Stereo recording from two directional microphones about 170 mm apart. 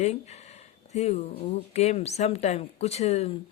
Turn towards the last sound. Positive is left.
turn(degrees=35)  # may be behind; listen again after turning